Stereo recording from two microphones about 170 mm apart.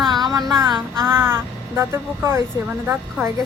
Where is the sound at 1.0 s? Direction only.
15° right (ahead or behind).